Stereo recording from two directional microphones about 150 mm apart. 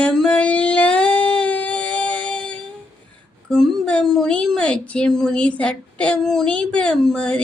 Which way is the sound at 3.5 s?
Centre (ahead or behind).